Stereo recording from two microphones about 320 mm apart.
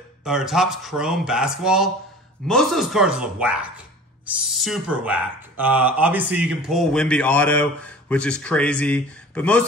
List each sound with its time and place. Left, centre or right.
0.2 s speech: centre